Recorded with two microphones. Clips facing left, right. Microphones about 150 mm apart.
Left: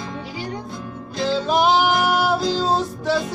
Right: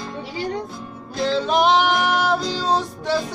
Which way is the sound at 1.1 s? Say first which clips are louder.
Even; centre (ahead or behind).